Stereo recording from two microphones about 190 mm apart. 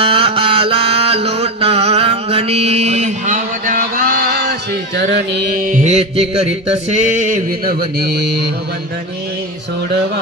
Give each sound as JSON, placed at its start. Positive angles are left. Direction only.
{"t": 0.0, "sound": "mantra", "side_deg": -30}
{"t": 5.7, "sound": "music", "side_deg": -40}